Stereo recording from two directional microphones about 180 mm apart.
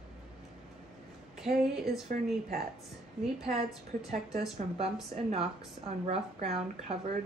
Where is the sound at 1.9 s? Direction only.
60° right (ahead or behind).